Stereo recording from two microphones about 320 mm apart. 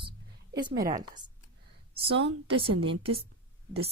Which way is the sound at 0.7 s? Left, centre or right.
Right.